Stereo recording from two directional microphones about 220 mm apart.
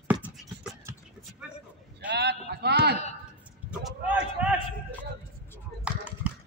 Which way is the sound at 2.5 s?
50° right (ahead or behind).